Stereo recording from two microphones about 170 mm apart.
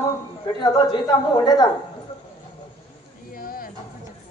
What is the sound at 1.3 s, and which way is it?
Speech, 20° left (ahead or behind).